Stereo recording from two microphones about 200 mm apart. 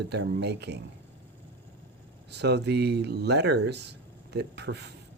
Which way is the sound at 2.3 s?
55° right (ahead or behind).